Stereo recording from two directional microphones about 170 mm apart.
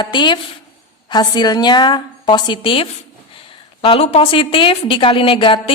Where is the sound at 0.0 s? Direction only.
25° left (ahead or behind).